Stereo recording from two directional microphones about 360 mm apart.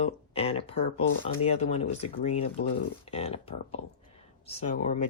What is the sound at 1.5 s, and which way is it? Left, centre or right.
Speech, centre.